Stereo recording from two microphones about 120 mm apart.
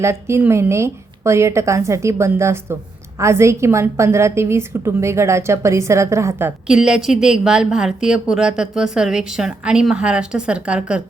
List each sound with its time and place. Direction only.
0.0 s a woman's voice: 20° right (ahead or behind)
6.7 s a woman's voice: 5° right (ahead or behind)